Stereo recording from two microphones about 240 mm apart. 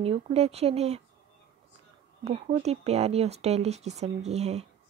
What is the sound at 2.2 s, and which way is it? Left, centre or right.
Speech, right.